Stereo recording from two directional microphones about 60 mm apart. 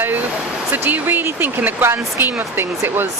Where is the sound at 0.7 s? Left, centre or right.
Right.